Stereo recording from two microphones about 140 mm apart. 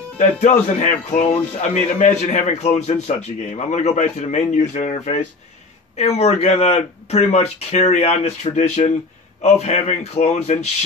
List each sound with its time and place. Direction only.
0.2 s a man's voice: 60° left (ahead or behind)